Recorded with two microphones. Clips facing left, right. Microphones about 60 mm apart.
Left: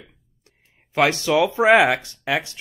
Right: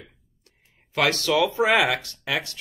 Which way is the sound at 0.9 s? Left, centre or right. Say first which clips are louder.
Left 3 dB; left.